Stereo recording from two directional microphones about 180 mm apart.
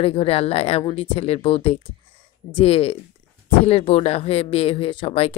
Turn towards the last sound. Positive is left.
turn(degrees=35)  # may be behind; listen again after turning